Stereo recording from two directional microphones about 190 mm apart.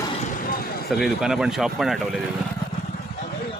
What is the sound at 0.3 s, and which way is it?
Vehicle, 45° left (ahead or behind).